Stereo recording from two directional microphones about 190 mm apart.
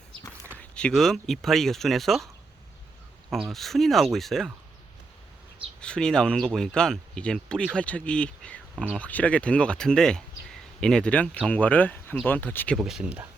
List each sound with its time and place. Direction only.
0.6 s speech: 5° left (ahead or behind)
5.8 s speech: 5° left (ahead or behind)
12.8 s speech: 5° right (ahead or behind)